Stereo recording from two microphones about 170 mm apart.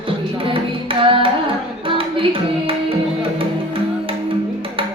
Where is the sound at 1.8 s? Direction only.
30° right (ahead or behind).